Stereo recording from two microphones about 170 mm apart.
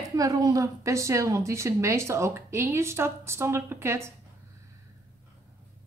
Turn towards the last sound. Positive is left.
turn(degrees=-15)  # may be behind; listen again after turning